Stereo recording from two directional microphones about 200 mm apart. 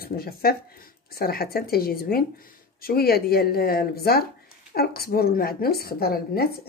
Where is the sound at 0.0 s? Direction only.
50° left (ahead or behind).